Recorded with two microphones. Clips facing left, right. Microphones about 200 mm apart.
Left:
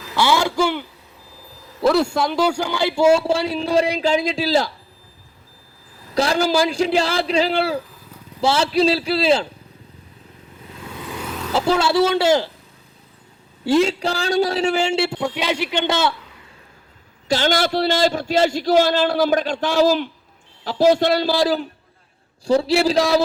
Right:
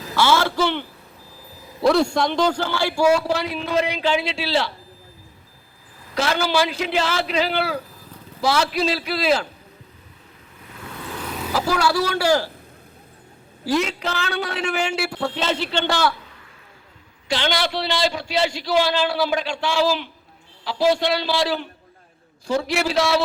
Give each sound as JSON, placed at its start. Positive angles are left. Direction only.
{"t": 0.2, "sound": "a man's voice", "side_deg": 15}
{"t": 6.1, "sound": "a man's voice", "side_deg": 35}
{"t": 11.5, "sound": "a man's voice", "side_deg": 25}
{"t": 13.7, "sound": "a man's voice", "side_deg": 30}
{"t": 15.2, "sound": "a man's voice", "side_deg": 10}
{"t": 17.2, "sound": "a man's voice", "side_deg": 45}